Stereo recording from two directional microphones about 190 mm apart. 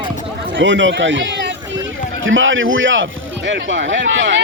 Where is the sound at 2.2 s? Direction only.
90° right.